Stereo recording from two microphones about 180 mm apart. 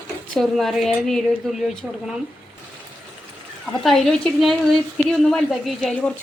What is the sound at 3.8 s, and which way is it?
A woman's voice, centre (ahead or behind).